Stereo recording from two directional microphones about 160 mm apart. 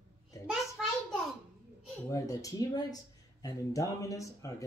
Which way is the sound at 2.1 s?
20° left (ahead or behind).